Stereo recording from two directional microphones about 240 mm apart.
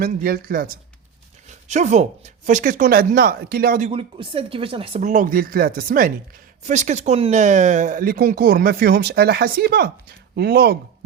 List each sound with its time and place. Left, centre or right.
0.0 s speech: right